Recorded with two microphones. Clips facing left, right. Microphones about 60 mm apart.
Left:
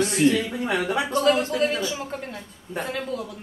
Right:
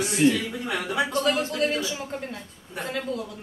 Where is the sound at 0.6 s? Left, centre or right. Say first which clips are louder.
Left 3 dB; left.